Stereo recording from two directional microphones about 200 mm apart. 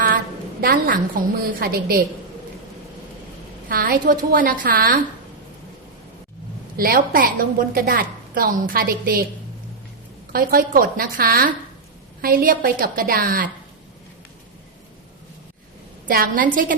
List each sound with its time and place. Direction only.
0.6 s a woman's voice: 45° right (ahead or behind)
3.7 s a woman's voice: 45° right (ahead or behind)
6.7 s a woman's voice: 45° right (ahead or behind)
10.3 s a woman's voice: 45° right (ahead or behind)
16.0 s a woman's voice: 45° right (ahead or behind)